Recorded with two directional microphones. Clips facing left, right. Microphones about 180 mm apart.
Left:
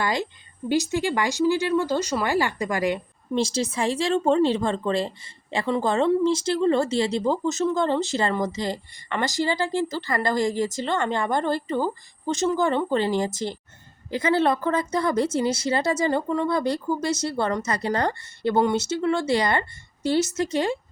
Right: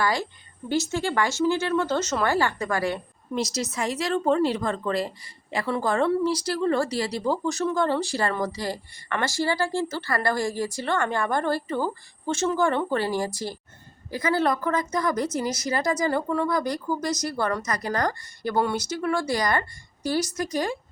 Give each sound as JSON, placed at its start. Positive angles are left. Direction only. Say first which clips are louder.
{"t": 0.0, "sound": "speech", "louder": "even", "side_deg": 20}
{"t": 3.3, "sound": "speech", "louder": "left 4 dB", "side_deg": 30}